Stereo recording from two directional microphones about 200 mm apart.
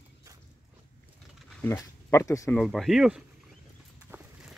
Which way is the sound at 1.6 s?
15° left (ahead or behind).